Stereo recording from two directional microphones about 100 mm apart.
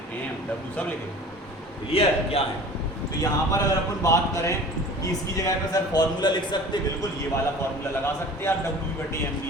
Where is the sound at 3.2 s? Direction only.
35° left (ahead or behind).